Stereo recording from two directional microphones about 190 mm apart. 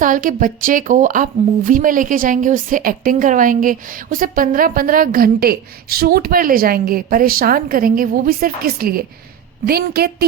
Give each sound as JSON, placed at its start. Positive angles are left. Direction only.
{"t": 0.0, "sound": "a woman's voice", "side_deg": -45}